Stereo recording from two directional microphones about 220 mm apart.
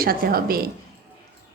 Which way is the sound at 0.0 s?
40° right (ahead or behind).